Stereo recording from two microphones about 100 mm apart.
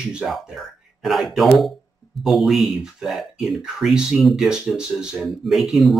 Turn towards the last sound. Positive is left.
turn(degrees=-5)  # may be behind; listen again after turning